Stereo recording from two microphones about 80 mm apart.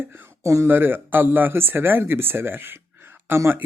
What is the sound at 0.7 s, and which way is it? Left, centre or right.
Speech, right.